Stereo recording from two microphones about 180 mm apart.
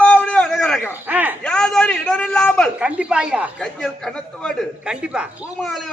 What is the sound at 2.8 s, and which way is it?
A man's voice, 5° right (ahead or behind).